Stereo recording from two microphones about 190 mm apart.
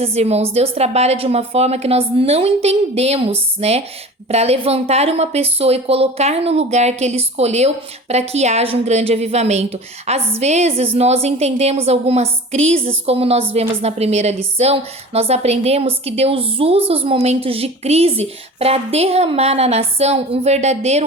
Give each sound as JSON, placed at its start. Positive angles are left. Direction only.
{"t": 0.0, "sound": "a woman's voice", "side_deg": -35}